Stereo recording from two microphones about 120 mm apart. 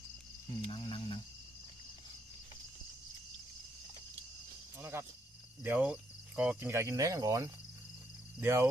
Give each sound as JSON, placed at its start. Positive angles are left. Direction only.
{"t": 0.7, "sound": "speech", "side_deg": 40}
{"t": 4.8, "sound": "speech", "side_deg": -20}